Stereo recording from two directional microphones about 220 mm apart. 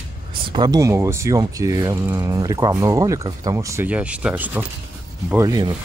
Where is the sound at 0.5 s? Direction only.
20° right (ahead or behind).